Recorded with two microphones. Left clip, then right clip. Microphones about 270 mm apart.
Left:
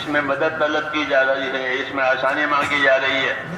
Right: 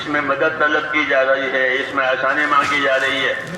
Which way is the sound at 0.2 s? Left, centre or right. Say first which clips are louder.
Right 2 dB; left.